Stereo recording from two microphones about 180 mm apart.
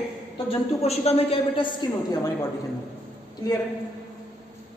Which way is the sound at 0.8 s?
35° left (ahead or behind).